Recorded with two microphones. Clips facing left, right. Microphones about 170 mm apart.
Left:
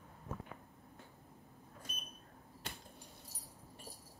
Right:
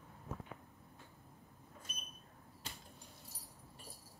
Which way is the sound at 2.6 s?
60° left (ahead or behind).